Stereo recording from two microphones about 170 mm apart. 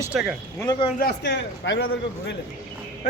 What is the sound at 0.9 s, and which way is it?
Speech, 75° left (ahead or behind).